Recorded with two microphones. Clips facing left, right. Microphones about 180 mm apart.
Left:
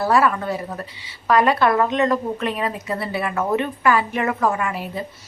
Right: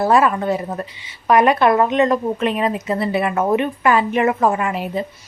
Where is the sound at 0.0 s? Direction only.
20° right (ahead or behind).